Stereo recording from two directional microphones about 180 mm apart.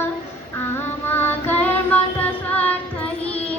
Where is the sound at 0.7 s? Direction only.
10° left (ahead or behind).